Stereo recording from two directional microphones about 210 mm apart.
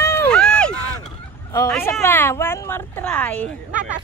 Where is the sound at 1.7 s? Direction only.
5° left (ahead or behind).